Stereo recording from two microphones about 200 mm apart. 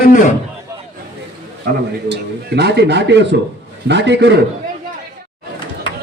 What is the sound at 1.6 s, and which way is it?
A man's voice, 60° right (ahead or behind).